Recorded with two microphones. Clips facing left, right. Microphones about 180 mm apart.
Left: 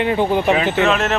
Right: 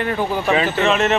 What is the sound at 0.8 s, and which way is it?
Speech, centre (ahead or behind).